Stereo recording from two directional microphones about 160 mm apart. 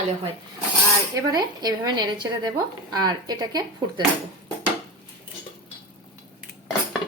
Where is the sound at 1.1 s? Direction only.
25° right (ahead or behind).